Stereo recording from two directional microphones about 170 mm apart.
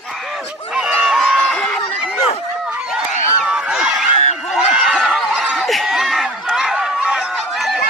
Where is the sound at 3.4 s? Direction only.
5° right (ahead or behind).